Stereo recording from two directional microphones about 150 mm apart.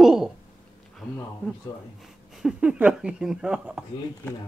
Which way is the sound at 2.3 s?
5° right (ahead or behind).